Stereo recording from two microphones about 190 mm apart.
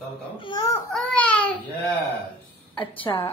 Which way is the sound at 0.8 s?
5° left (ahead or behind).